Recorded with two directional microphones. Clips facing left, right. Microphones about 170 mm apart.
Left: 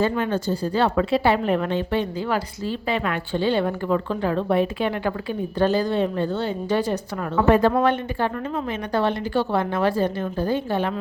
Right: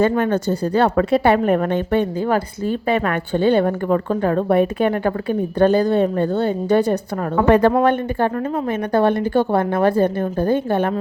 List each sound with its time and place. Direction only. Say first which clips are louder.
0.0 s speech: right 5 dB; 50° right (ahead or behind)